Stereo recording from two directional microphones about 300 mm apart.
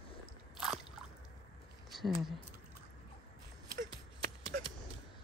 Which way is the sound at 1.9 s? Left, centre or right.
Centre.